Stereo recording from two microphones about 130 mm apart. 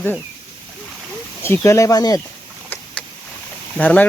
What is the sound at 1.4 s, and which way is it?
Speech, 20° left (ahead or behind).